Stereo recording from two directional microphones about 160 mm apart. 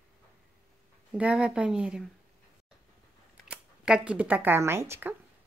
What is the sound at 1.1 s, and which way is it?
Speech, 5° right (ahead or behind).